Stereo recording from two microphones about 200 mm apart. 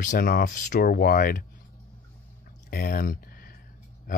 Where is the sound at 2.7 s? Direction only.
45° left (ahead or behind).